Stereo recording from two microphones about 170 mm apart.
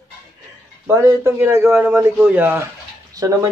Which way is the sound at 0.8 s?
15° right (ahead or behind).